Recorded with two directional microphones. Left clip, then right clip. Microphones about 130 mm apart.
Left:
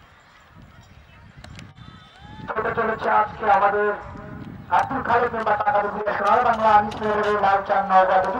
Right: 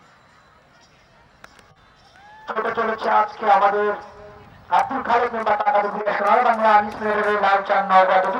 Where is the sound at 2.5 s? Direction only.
35° right (ahead or behind).